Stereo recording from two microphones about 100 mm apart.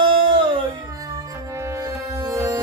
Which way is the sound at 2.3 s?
30° right (ahead or behind).